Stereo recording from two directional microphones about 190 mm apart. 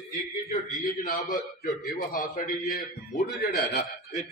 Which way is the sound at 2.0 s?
45° left (ahead or behind).